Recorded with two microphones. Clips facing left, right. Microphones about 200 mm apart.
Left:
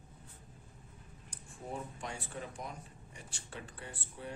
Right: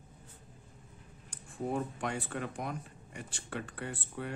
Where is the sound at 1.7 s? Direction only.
65° right (ahead or behind).